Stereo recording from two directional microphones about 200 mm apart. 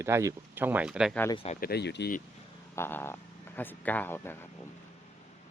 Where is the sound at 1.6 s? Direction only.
55° left (ahead or behind).